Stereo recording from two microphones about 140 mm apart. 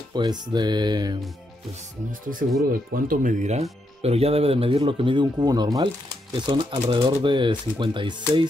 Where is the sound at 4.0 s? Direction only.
45° right (ahead or behind).